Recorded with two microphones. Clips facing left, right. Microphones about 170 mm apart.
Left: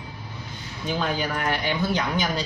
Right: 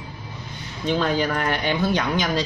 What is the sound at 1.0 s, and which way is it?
Speech, 65° right (ahead or behind).